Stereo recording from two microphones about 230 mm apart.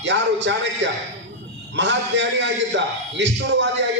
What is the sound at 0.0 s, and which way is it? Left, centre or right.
A man's voice, right.